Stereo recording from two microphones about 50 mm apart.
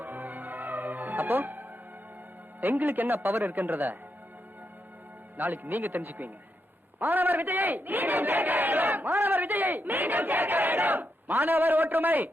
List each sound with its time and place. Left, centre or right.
0.0 s music: right
2.6 s speech: right
5.4 s a man's voice: right